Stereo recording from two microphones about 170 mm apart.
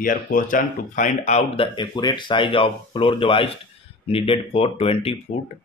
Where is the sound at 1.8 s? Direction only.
25° left (ahead or behind).